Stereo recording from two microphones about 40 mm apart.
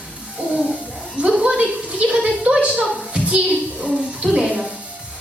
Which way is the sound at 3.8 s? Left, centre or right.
Right.